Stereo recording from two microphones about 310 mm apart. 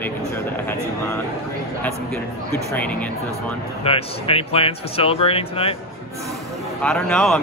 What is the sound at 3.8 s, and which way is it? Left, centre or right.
Speech, centre.